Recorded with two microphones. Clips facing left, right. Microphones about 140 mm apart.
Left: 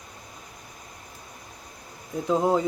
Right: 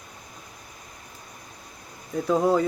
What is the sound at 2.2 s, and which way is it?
Speech, 20° left (ahead or behind).